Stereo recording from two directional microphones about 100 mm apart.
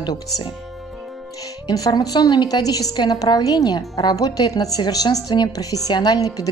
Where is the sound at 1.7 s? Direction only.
40° left (ahead or behind).